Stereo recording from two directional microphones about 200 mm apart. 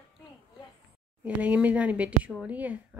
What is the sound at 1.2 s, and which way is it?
A woman's voice, 5° right (ahead or behind).